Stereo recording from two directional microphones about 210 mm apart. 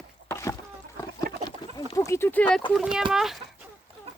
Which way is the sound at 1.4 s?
20° left (ahead or behind).